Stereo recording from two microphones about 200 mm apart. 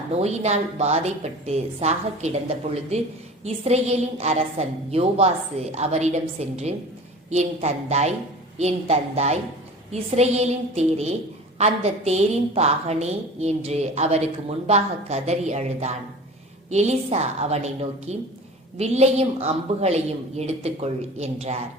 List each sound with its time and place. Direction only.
0.1 s a woman's voice: 35° right (ahead or behind)